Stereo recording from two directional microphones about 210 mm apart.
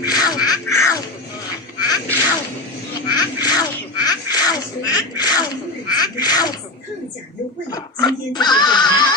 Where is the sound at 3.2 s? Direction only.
20° left (ahead or behind).